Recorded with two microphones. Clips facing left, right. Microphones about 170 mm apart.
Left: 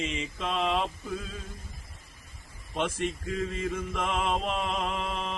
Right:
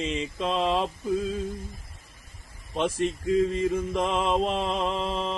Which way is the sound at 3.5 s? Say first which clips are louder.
Right 6 dB; 35° right (ahead or behind).